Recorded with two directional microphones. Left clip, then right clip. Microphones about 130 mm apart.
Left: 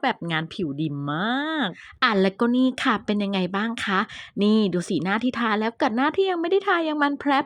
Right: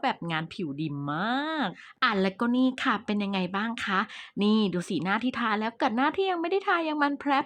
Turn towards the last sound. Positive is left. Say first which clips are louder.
# left 4 dB
turn(degrees=35)  # may be behind; listen again after turning